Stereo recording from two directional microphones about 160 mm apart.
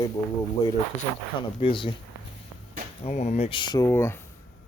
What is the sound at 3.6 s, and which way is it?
Speech, 25° left (ahead or behind).